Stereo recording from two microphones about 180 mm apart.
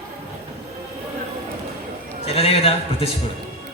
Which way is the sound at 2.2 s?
35° left (ahead or behind).